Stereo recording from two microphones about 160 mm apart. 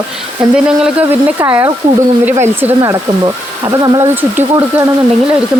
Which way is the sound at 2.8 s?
20° right (ahead or behind).